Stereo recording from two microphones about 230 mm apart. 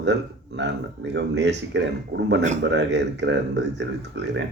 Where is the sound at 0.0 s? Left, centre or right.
Right.